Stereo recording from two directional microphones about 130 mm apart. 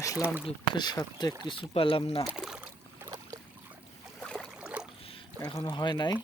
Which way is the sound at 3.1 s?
25° right (ahead or behind).